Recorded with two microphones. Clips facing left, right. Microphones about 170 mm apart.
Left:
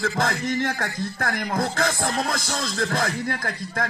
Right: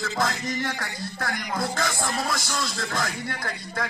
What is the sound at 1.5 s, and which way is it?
Speech, 60° left (ahead or behind).